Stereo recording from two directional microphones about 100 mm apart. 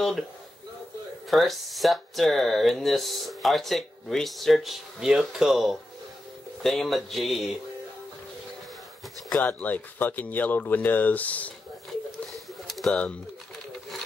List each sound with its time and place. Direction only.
1.3 s speech: centre (ahead or behind)
9.3 s speech: 15° left (ahead or behind)
11.9 s a sound: centre (ahead or behind)